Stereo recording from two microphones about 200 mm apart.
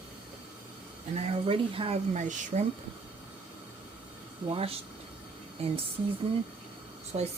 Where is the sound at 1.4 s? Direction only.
25° right (ahead or behind).